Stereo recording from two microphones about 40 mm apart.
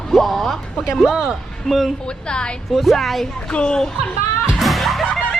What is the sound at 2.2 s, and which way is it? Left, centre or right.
Speech, left.